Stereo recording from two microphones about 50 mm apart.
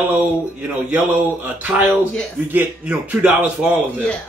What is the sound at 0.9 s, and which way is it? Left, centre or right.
Speech, right.